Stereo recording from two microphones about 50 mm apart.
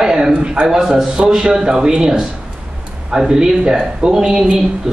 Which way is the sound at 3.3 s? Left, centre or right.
Centre.